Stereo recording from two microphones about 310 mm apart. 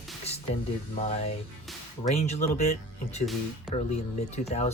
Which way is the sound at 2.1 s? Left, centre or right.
Left.